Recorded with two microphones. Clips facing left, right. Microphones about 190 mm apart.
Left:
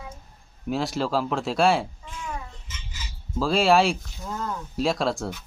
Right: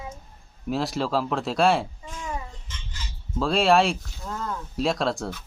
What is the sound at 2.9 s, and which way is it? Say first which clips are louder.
Speech: right 1 dB; 5° left (ahead or behind).